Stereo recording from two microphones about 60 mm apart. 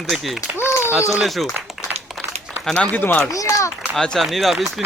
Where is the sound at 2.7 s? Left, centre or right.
Left.